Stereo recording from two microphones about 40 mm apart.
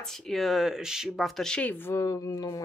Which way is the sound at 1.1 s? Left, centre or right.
Centre.